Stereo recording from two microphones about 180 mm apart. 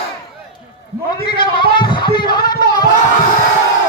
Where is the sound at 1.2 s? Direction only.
25° left (ahead or behind).